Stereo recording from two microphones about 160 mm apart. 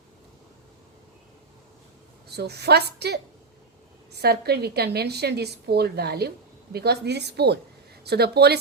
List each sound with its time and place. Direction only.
2.3 s a woman's voice: 90° right
4.2 s a woman's voice: 85° right